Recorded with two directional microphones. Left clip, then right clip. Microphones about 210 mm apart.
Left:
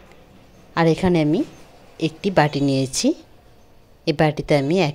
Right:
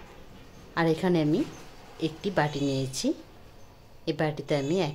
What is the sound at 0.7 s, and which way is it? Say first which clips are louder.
A woman's voice: left 7 dB; 30° left (ahead or behind).